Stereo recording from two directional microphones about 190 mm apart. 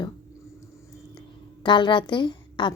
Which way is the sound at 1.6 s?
25° left (ahead or behind).